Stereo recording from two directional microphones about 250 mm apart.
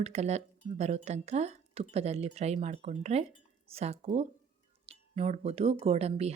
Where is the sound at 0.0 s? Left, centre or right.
Right.